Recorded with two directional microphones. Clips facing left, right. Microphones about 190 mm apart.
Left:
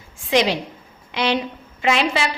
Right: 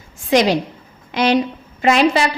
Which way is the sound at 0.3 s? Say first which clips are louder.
Right 4 dB; 45° right (ahead or behind).